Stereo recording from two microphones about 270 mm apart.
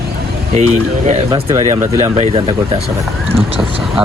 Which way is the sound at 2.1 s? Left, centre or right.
Right.